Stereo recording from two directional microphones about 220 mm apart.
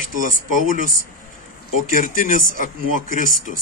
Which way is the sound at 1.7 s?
35° left (ahead or behind).